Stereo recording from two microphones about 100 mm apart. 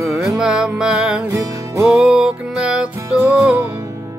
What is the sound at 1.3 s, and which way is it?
Music, 30° right (ahead or behind).